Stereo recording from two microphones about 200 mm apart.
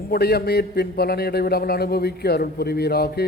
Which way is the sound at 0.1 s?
50° left (ahead or behind).